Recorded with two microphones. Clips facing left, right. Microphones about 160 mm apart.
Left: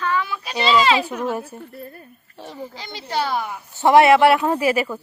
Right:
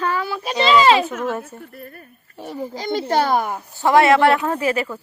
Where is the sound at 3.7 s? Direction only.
20° left (ahead or behind).